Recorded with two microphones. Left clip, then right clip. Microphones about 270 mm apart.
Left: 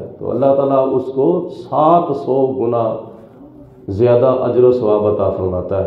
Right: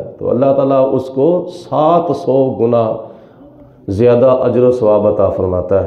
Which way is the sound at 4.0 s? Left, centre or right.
Right.